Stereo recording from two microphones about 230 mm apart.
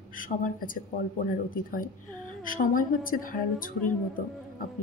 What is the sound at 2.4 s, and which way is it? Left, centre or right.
A woman's voice, left.